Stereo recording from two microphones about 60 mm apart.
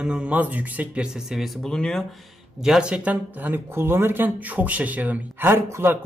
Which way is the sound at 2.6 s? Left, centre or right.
Centre.